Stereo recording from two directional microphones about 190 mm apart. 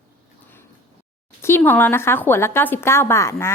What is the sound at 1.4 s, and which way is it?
A woman's voice, 10° left (ahead or behind).